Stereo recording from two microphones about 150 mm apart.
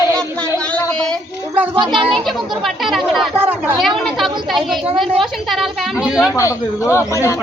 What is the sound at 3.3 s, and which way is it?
Speech, 15° right (ahead or behind).